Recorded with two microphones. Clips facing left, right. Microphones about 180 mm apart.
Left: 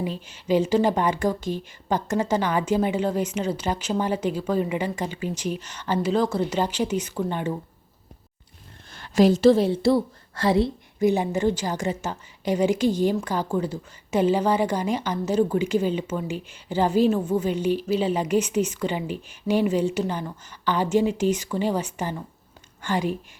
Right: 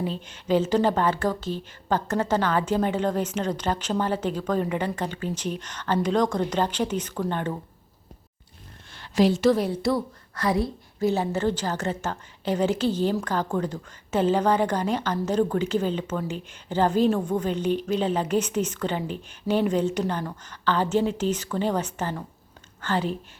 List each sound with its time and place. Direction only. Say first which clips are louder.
0.0 s a woman's voice: even; 10° left (ahead or behind)
8.9 s a sound: left 3 dB; 45° left (ahead or behind)
9.4 s a woman's voice: left 4 dB; 25° left (ahead or behind)
11.0 s a woman's voice: left 2 dB; 15° left (ahead or behind)